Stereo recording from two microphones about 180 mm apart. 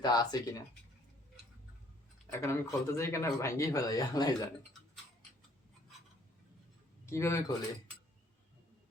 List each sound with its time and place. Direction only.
0.0 s speech: 20° left (ahead or behind)
2.3 s a man's voice: 15° left (ahead or behind)
7.0 s speech: 15° left (ahead or behind)